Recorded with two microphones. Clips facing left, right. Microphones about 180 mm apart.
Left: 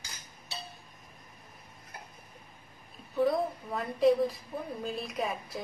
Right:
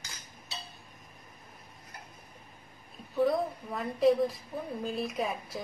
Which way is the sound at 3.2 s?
Centre (ahead or behind).